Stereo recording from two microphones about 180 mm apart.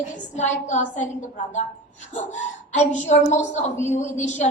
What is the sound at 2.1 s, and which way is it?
A woman's voice, 40° left (ahead or behind).